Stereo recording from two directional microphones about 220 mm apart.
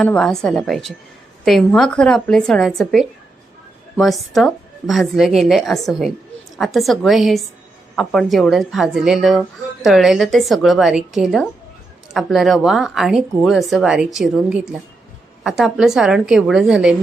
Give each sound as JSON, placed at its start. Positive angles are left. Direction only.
{"t": 0.0, "sound": "speech", "side_deg": 5}